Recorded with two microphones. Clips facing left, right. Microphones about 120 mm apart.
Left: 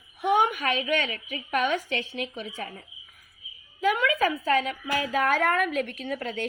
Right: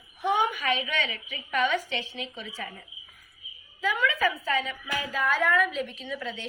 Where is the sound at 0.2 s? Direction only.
60° left (ahead or behind).